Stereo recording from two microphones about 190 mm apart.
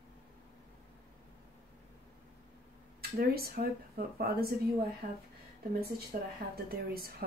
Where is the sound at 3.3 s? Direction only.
55° right (ahead or behind).